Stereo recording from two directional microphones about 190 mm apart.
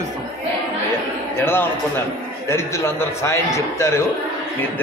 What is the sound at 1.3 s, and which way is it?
A man's voice, 10° left (ahead or behind).